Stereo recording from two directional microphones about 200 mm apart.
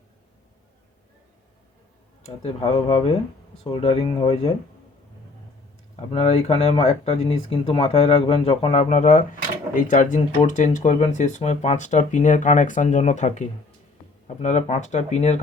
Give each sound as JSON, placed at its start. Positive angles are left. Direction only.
{"t": 2.2, "sound": "speech", "side_deg": 30}
{"t": 6.1, "sound": "speech", "side_deg": 30}